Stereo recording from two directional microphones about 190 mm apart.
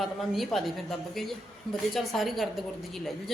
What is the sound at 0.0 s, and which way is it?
A woman's voice, centre (ahead or behind).